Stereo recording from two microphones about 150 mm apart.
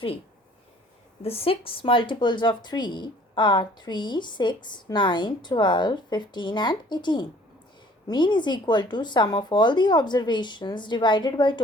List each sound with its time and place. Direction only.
1.2 s speech: 40° left (ahead or behind)